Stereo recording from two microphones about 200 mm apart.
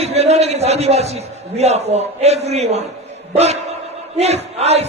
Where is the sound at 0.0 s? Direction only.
35° right (ahead or behind).